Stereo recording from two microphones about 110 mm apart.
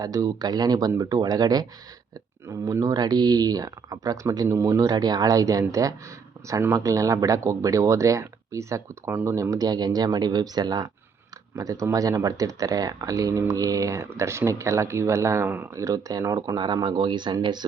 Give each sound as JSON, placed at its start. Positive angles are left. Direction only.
{"t": 0.0, "sound": "speech", "side_deg": -35}
{"t": 16.6, "sound": "speech", "side_deg": -40}